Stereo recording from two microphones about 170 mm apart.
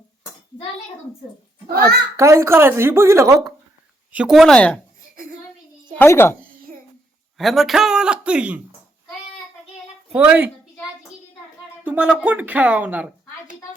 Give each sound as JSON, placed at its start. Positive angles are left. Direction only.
{"t": 2.1, "sound": "speech", "side_deg": -15}
{"t": 4.1, "sound": "a man's voice", "side_deg": -5}
{"t": 6.0, "sound": "speech", "side_deg": 15}
{"t": 7.3, "sound": "a man's voice", "side_deg": 0}
{"t": 10.1, "sound": "speech", "side_deg": -10}
{"t": 11.8, "sound": "speech", "side_deg": -10}